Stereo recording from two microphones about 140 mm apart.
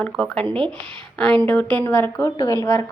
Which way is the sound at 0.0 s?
5° left (ahead or behind).